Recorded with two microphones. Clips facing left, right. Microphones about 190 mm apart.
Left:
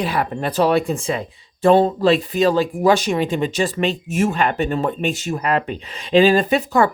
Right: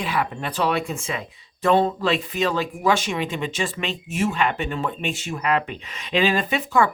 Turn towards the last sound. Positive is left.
turn(degrees=40)  # may be behind; listen again after turning